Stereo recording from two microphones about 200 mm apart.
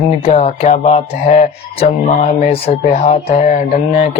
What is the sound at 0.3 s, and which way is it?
Speech, 30° left (ahead or behind).